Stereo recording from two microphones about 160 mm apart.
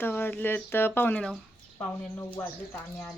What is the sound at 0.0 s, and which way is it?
Speech, 15° left (ahead or behind).